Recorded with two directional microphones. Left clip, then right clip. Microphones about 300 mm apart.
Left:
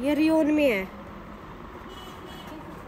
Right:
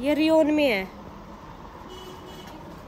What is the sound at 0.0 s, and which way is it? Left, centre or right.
Speech, centre.